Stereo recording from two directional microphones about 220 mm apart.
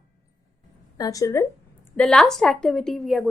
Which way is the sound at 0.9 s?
15° left (ahead or behind).